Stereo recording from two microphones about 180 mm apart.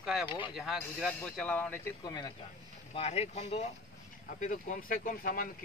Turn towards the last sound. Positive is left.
turn(degrees=50)  # may be behind; listen again after turning